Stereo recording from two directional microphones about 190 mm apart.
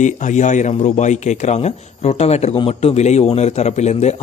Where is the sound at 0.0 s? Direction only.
40° left (ahead or behind).